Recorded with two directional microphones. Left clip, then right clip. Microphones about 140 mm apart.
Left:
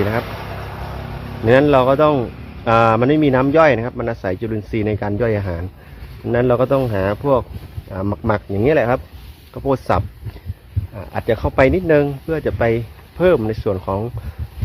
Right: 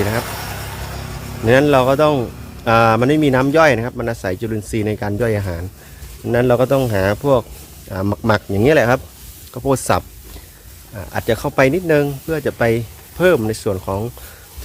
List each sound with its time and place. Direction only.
1.5 s speech: 20° right (ahead or behind)